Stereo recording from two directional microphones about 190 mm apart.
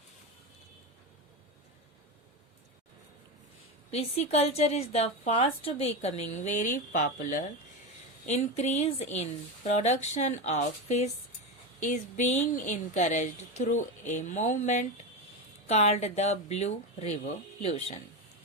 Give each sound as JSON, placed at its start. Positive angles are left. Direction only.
{"t": 3.9, "sound": "a woman's voice", "side_deg": 35}